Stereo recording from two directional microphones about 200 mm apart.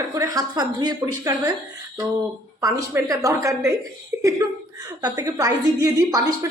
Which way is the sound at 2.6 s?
15° right (ahead or behind).